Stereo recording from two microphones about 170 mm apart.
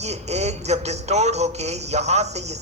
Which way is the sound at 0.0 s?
40° right (ahead or behind).